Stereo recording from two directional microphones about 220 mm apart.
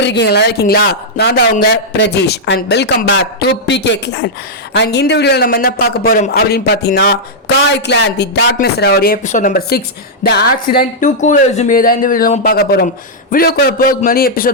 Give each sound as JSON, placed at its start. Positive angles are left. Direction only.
{"t": 0.0, "sound": "speech", "side_deg": 50}